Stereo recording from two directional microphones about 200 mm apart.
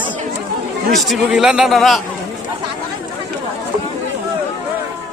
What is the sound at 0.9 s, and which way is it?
A man's voice, centre (ahead or behind).